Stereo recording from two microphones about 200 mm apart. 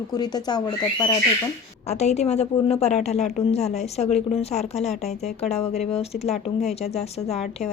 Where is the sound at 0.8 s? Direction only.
30° left (ahead or behind).